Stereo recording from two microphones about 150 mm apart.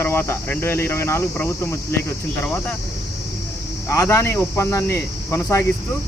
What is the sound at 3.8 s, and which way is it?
Speech, 15° left (ahead or behind).